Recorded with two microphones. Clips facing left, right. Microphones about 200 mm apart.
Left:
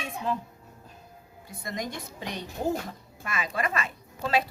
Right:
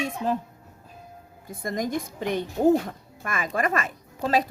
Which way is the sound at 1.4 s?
50° right (ahead or behind).